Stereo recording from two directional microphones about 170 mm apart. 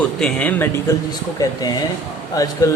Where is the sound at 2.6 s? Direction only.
20° left (ahead or behind).